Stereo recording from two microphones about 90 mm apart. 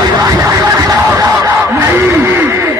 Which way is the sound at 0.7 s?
40° right (ahead or behind).